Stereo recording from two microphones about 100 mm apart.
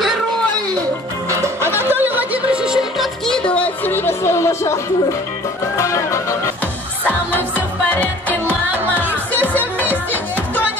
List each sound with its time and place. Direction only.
1.3 s music: 25° right (ahead or behind); by 3.1 s 5° right (ahead or behind)
3.3 s music: 10° left (ahead or behind); by 4.7 s 30° left (ahead or behind)
5.8 s music: 30° left (ahead or behind)
7.9 s music: 15° left (ahead or behind)